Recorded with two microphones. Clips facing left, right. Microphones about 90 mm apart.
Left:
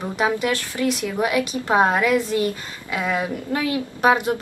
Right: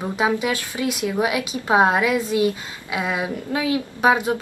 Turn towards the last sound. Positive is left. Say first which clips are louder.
# even
turn(degrees=-10)  # may be behind; listen again after turning